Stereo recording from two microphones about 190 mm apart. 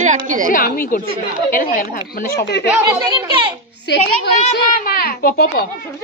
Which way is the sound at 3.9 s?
60° left (ahead or behind).